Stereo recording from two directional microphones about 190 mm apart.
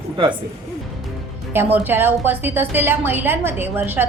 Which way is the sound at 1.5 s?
10° right (ahead or behind).